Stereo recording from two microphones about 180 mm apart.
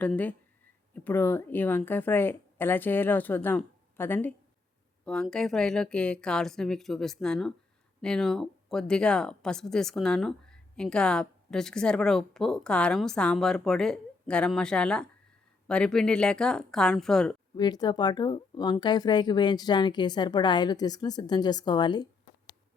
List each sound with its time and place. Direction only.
0.0 s a woman's voice: 10° left (ahead or behind)
17.5 s a woman's voice: 25° left (ahead or behind)